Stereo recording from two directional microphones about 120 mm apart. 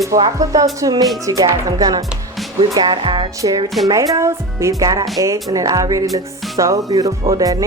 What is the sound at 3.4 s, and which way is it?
Speech, 30° right (ahead or behind).